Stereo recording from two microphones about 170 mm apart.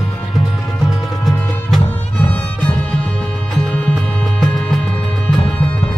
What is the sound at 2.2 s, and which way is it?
Music, 10° left (ahead or behind).